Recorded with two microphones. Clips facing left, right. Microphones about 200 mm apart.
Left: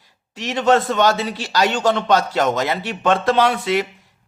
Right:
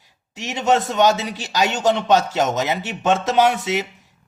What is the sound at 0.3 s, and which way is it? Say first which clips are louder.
A man's voice: left 3 dB; 20° right (ahead or behind).